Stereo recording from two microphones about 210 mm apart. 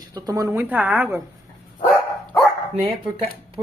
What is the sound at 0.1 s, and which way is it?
Speech, 15° right (ahead or behind).